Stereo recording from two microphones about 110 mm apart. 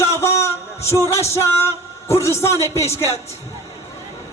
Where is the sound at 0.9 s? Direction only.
25° left (ahead or behind).